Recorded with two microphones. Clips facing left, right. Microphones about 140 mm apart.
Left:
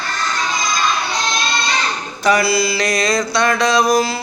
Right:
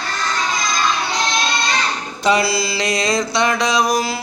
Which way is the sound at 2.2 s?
25° right (ahead or behind).